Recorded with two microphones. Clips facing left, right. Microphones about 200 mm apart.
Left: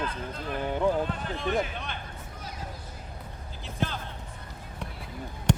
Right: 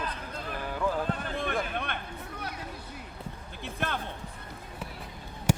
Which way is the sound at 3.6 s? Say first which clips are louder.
Left 1 dB; 60° right (ahead or behind).